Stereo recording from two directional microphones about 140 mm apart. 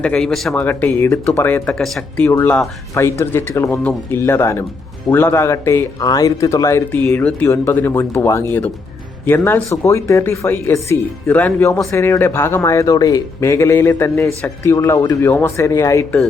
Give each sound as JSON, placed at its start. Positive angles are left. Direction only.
{"t": 0.0, "sound": "speech", "side_deg": 5}
{"t": 0.5, "sound": "speech", "side_deg": 10}